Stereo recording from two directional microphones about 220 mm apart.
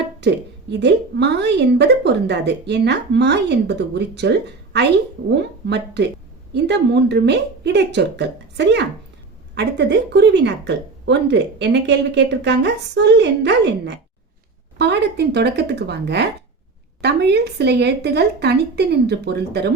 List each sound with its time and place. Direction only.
0.2 s a woman's voice: 50° right (ahead or behind)